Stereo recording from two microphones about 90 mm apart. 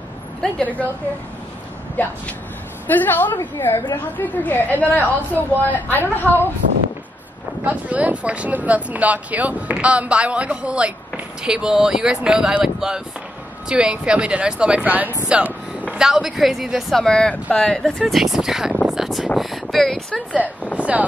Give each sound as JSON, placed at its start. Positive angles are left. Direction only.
{"t": 0.4, "sound": "a woman's voice", "side_deg": 15}
{"t": 2.0, "sound": "a woman's voice", "side_deg": 20}
{"t": 7.6, "sound": "speech", "side_deg": -15}
{"t": 18.9, "sound": "a sound", "side_deg": -5}
{"t": 19.3, "sound": "speech", "side_deg": 0}
{"t": 20.8, "sound": "speech", "side_deg": -15}